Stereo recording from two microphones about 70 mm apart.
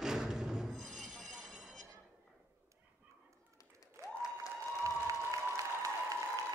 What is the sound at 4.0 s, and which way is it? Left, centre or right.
Applause, right.